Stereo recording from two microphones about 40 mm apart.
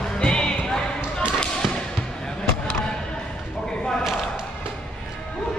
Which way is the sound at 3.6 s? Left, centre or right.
Centre.